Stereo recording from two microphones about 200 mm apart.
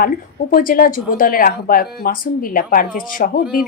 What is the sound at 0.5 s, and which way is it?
A woman's voice, 45° left (ahead or behind).